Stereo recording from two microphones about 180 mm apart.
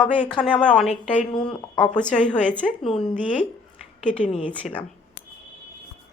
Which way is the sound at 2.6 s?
30° left (ahead or behind).